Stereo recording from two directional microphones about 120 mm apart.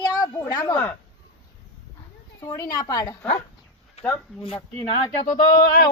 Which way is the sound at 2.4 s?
30° left (ahead or behind).